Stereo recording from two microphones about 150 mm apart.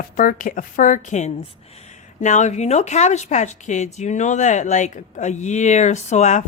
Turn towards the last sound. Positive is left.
turn(degrees=50)  # may be behind; listen again after turning